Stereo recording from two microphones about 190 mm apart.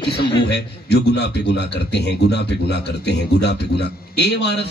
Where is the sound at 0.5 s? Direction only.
60° left (ahead or behind).